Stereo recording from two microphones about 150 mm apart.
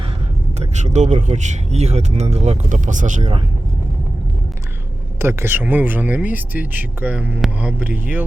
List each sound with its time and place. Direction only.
0.6 s speech: 50° right (ahead or behind)
5.2 s speech: 15° right (ahead or behind)